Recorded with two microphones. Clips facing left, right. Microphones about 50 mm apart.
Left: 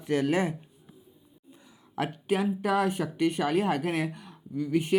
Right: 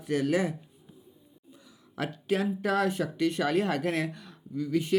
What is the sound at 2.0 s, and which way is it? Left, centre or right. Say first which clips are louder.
Speech: left 1 dB; left.